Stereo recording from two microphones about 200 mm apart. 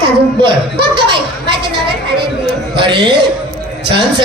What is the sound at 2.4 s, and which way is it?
Speech, 25° right (ahead or behind).